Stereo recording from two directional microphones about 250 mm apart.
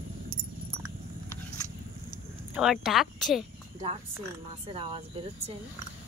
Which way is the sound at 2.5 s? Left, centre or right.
Centre.